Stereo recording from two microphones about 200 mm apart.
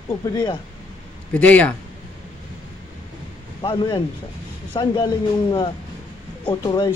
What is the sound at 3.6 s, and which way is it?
Speech, 25° left (ahead or behind).